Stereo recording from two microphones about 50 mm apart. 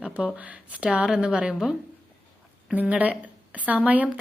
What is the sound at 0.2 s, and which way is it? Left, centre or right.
Speech, right.